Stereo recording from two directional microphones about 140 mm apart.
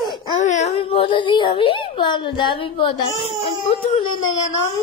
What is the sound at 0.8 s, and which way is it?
Speech, 40° left (ahead or behind).